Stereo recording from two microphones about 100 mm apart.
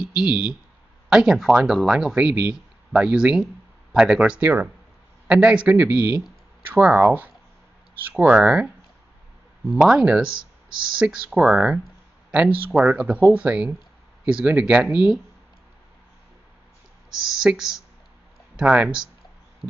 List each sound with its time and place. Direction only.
0.0 s speech: 10° right (ahead or behind)
11.2 s speech: 10° right (ahead or behind)
17.1 s speech: 5° right (ahead or behind)